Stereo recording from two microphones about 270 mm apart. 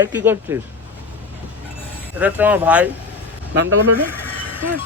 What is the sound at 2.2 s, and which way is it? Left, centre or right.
Speech, centre.